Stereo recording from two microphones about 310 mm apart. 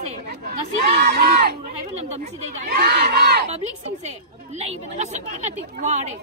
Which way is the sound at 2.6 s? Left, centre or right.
Right.